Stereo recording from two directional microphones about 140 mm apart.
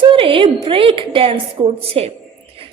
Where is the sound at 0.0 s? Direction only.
40° right (ahead or behind).